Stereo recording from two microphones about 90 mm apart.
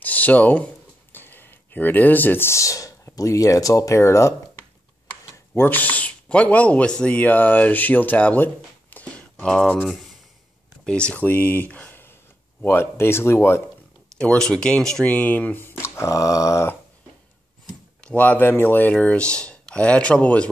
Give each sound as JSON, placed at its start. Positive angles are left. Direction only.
{"t": 0.0, "sound": "speech", "side_deg": 20}
{"t": 5.6, "sound": "speech", "side_deg": 20}
{"t": 8.9, "sound": "a sound", "side_deg": 10}
{"t": 10.9, "sound": "speech", "side_deg": 10}
{"t": 14.1, "sound": "speech", "side_deg": 10}
{"t": 15.0, "sound": "speech", "side_deg": 15}
{"t": 18.0, "sound": "speech", "side_deg": 15}